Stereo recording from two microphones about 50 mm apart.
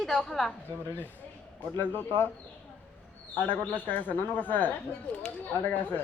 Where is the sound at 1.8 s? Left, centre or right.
Left.